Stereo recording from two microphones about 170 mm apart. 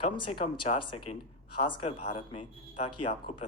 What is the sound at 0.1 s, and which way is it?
Speech, 30° left (ahead or behind).